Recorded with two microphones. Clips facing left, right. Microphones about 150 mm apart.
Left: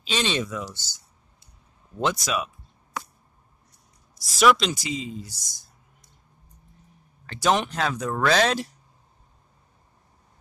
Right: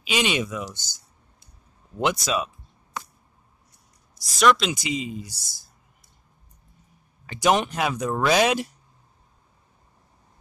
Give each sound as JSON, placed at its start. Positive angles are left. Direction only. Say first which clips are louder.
{"t": 0.0, "sound": "speech", "louder": "right 2 dB", "side_deg": -10}
{"t": 2.2, "sound": "speech", "louder": "right 2 dB", "side_deg": -30}
{"t": 4.2, "sound": "speech", "louder": "even", "side_deg": 0}
{"t": 4.7, "sound": "speech", "louder": "right 2 dB", "side_deg": -15}
{"t": 7.2, "sound": "speech", "louder": "right 2 dB", "side_deg": -15}